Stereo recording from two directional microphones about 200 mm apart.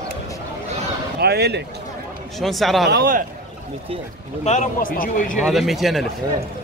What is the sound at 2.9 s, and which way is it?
Speech, 50° right (ahead or behind).